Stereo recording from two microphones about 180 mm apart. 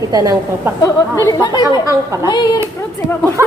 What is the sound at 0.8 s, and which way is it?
Speech, 15° left (ahead or behind).